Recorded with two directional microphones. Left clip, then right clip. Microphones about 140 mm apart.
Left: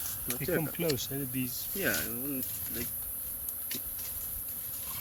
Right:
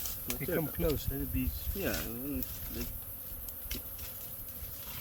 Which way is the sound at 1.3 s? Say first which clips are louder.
Left 1 dB; 75° left (ahead or behind).